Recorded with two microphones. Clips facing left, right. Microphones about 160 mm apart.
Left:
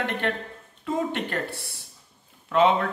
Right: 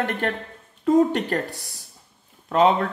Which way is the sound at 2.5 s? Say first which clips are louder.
Right 2 dB; 40° right (ahead or behind).